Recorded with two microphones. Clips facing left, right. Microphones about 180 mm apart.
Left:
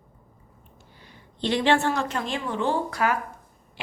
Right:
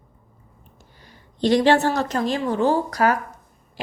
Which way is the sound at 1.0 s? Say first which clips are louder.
Right 7 dB; 40° right (ahead or behind).